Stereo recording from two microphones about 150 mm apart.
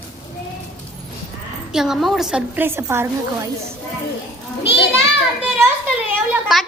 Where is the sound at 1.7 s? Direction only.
5° right (ahead or behind).